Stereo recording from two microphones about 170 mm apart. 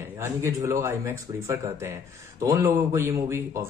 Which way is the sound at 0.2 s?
15° right (ahead or behind).